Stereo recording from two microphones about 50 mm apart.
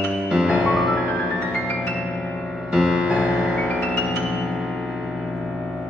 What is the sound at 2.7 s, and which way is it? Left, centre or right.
Music, centre.